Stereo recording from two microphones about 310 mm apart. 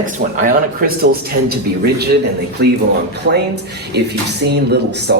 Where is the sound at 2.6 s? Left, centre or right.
Right.